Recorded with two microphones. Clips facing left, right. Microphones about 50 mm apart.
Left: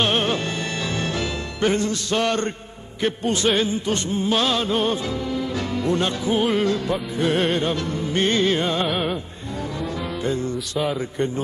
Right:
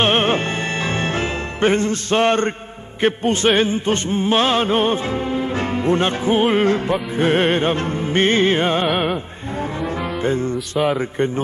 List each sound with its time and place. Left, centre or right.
0.0 s music: right
8.8 s music: centre
10.2 s music: right